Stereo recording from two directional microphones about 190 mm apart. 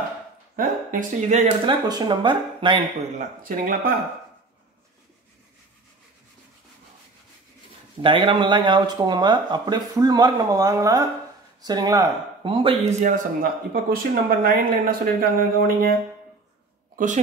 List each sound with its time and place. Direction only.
0.6 s speech: 40° right (ahead or behind)
1.7 s speech: 20° right (ahead or behind)
3.2 s speech: 45° right (ahead or behind)
8.0 s speech: 25° right (ahead or behind)
13.0 s speech: 45° right (ahead or behind)